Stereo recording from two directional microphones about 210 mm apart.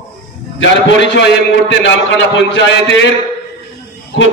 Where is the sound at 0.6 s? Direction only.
60° left (ahead or behind).